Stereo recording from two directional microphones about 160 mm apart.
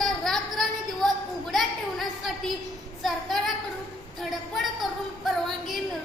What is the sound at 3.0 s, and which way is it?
Child singing, centre (ahead or behind).